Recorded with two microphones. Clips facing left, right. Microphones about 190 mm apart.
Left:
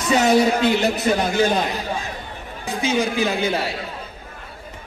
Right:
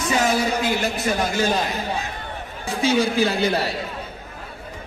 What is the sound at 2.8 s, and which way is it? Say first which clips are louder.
Speech: right 2 dB; 35° right (ahead or behind).